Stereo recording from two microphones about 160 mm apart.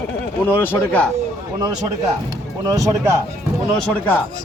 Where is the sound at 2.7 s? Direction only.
20° right (ahead or behind).